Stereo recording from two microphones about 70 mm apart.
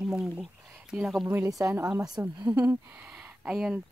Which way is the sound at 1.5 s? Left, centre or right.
Right.